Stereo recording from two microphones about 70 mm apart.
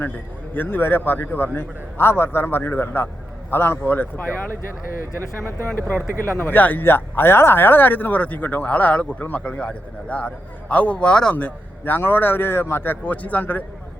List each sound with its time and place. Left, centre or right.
0.5 s a man's voice: left
5.5 s a man's voice: left